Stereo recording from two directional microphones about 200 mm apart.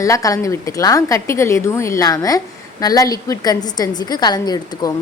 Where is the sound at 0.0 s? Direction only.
15° left (ahead or behind).